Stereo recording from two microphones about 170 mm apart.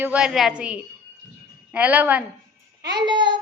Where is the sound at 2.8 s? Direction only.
25° right (ahead or behind).